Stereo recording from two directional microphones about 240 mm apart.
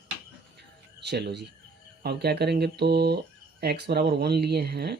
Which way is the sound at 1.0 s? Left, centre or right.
Right.